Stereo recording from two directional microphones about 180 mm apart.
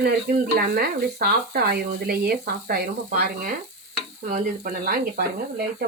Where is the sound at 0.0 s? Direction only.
60° right (ahead or behind).